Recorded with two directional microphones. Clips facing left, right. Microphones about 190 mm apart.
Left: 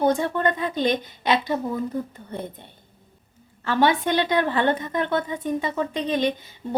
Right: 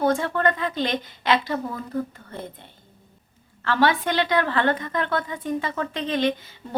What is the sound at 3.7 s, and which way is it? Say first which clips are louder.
A woman's voice: left 1 dB; 20° left (ahead or behind).